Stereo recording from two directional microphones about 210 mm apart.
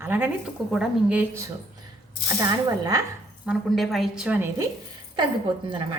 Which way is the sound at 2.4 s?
20° right (ahead or behind).